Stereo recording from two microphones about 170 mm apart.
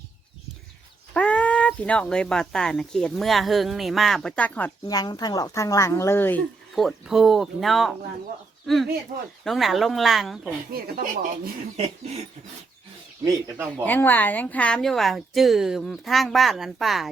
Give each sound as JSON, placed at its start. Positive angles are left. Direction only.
{"t": 1.1, "sound": "speech", "side_deg": 5}
{"t": 4.9, "sound": "a woman's voice", "side_deg": 25}
{"t": 6.7, "sound": "speech", "side_deg": 0}
{"t": 10.7, "sound": "speech", "side_deg": -60}
{"t": 13.8, "sound": "speech", "side_deg": 10}